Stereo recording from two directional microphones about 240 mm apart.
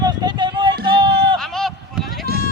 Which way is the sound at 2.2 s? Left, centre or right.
Right.